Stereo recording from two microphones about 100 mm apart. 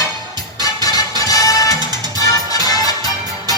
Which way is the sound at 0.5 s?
40° left (ahead or behind).